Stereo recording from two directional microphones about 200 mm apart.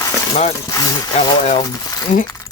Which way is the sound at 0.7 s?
20° left (ahead or behind).